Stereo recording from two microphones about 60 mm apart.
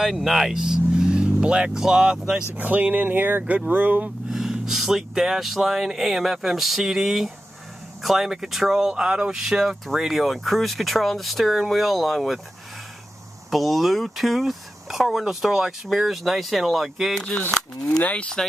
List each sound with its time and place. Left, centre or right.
0.0 s speech: centre
2.5 s speech: right
4.3 s speech: centre
13.5 s speech: centre
18.0 s moo: centre